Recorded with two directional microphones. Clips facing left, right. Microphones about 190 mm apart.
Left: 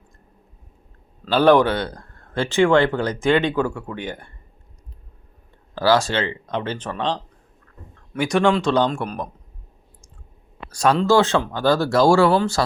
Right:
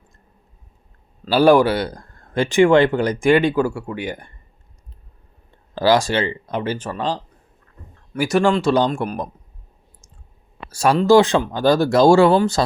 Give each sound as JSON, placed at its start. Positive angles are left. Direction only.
{"t": 1.2, "sound": "speech", "side_deg": -10}
{"t": 5.7, "sound": "speech", "side_deg": -15}
{"t": 10.7, "sound": "speech", "side_deg": -5}